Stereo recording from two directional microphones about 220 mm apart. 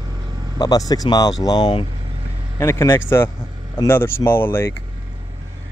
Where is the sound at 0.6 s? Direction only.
15° left (ahead or behind).